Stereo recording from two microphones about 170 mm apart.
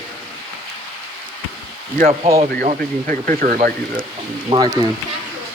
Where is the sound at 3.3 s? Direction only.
50° right (ahead or behind).